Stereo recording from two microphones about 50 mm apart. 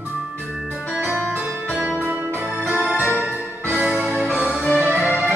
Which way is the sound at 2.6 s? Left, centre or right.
Right.